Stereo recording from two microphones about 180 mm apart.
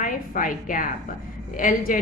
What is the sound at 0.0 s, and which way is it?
A woman's voice, 50° left (ahead or behind).